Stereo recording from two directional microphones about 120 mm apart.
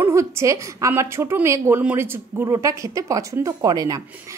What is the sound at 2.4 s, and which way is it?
A woman's voice, 25° right (ahead or behind).